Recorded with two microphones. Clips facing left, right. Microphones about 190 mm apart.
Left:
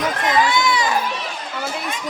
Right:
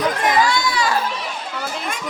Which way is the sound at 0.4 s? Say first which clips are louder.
Left 1 dB; 20° left (ahead or behind).